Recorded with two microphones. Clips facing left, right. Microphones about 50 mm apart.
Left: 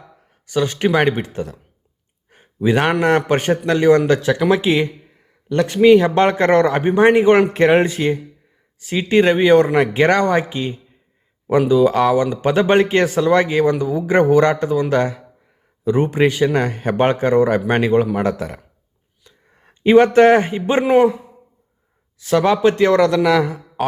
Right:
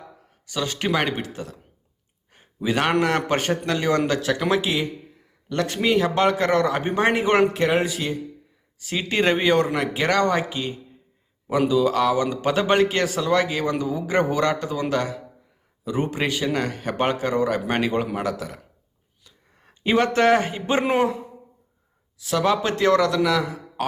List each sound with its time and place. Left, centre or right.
0.4 s speech: left
2.6 s speech: left
5.8 s speech: centre
6.3 s speech: left
6.7 s speech: left
7.5 s speech: left
8.9 s speech: left
19.3 s a sound: left
19.6 s speech: left
22.2 s speech: left